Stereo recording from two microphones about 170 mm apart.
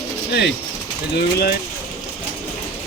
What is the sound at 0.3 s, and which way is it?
Speech, 80° left.